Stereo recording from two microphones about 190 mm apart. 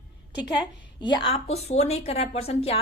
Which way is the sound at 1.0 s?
25° left (ahead or behind).